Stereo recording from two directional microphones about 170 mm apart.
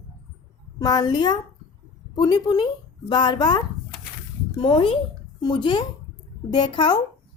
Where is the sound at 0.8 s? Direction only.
25° left (ahead or behind).